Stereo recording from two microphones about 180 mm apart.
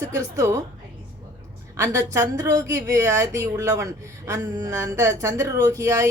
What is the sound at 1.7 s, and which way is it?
A woman's voice, 15° right (ahead or behind).